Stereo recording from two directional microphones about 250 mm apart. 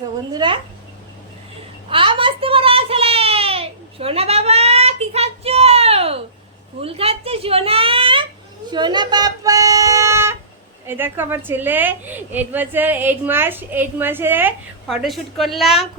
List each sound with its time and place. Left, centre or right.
0.3 s speech: centre
1.9 s a sound: right
10.8 s a woman's voice: centre